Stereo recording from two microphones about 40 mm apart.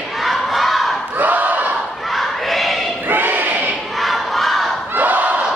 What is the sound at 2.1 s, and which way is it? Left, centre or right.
Battle cry, centre.